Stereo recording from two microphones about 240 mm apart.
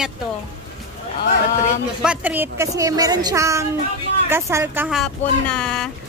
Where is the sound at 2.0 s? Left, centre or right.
Centre.